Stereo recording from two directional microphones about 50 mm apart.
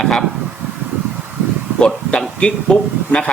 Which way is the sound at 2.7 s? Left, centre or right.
Centre.